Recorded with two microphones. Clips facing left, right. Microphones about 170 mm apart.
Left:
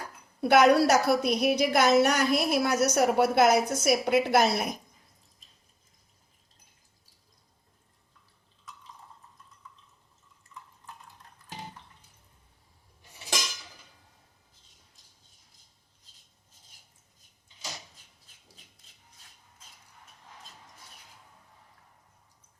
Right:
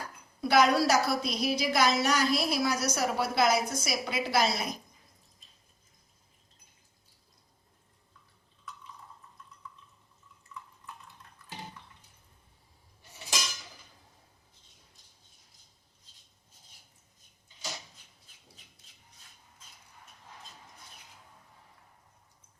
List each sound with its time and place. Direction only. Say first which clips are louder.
0.4 s a woman's voice: left 4 dB; 60° left (ahead or behind)